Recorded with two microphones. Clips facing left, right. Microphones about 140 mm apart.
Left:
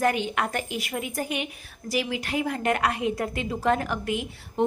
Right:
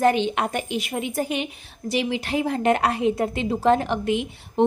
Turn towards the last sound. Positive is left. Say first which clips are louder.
# right 5 dB
turn(degrees=-25)  # may be behind; listen again after turning